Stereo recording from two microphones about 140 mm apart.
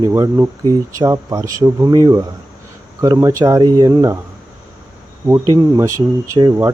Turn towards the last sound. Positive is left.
turn(degrees=-30)  # may be behind; listen again after turning